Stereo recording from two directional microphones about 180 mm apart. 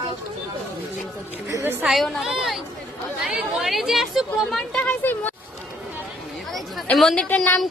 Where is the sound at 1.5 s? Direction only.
15° right (ahead or behind).